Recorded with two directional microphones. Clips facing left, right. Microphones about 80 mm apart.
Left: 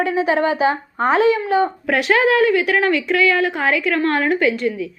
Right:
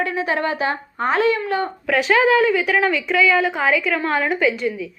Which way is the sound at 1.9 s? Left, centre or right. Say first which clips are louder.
Right 1 dB; centre.